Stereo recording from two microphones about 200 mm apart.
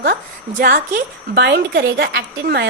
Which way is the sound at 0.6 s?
50° right (ahead or behind).